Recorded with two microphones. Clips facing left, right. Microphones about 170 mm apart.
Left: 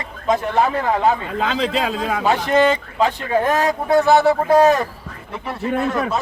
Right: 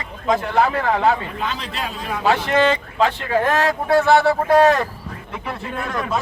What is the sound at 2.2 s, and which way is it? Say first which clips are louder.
Speech: left 1 dB; 15° left (ahead or behind).